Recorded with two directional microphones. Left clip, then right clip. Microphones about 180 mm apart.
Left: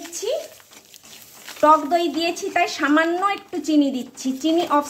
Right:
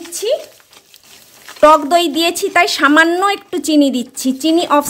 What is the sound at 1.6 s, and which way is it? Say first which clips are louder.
A woman's voice: right 7 dB; 55° right (ahead or behind).